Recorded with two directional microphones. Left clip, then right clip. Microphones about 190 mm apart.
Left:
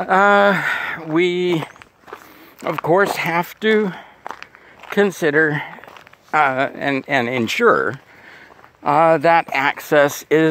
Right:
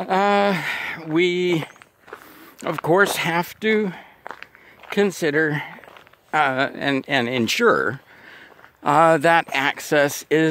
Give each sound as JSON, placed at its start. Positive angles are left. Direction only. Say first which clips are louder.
{"t": 0.0, "sound": "speech", "louder": "left 5 dB", "side_deg": -25}
{"t": 2.6, "sound": "speech", "louder": "left 2 dB", "side_deg": -30}
{"t": 3.6, "sound": "speech", "louder": "left 5 dB", "side_deg": -20}
{"t": 4.2, "sound": "walk", "louder": "left 4 dB", "side_deg": 50}
{"t": 4.8, "sound": "speech", "louder": "left 4 dB", "side_deg": -20}
{"t": 8.8, "sound": "speech", "louder": "left 2 dB", "side_deg": -40}